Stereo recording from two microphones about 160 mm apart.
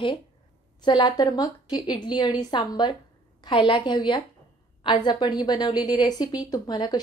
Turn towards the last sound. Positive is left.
turn(degrees=25)  # may be behind; listen again after turning